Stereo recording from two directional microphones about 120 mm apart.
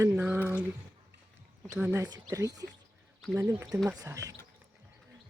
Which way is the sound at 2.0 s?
30° right (ahead or behind).